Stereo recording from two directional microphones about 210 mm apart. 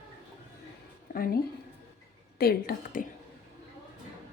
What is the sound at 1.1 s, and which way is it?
Speech, 45° left (ahead or behind).